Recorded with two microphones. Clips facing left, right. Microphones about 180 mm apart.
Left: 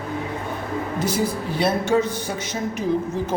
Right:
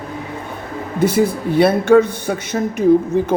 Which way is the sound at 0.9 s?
60° right (ahead or behind).